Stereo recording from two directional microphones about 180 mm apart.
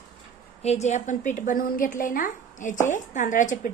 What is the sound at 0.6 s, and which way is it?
A woman's voice, 40° left (ahead or behind).